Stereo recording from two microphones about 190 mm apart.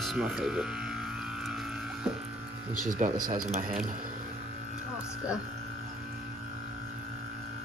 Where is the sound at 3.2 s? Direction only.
45° right (ahead or behind).